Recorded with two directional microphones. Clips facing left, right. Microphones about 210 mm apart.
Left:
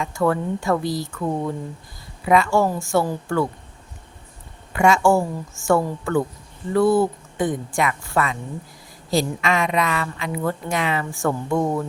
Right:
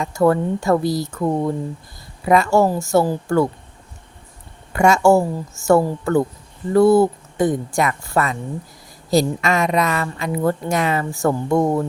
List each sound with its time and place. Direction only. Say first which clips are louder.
0.0 s a woman's voice: right 5 dB; 40° right (ahead or behind)
4.7 s a woman's voice: right 3 dB; 40° right (ahead or behind)